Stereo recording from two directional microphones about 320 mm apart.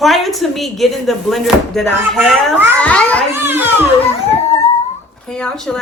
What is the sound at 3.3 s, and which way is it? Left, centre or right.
Speech, centre.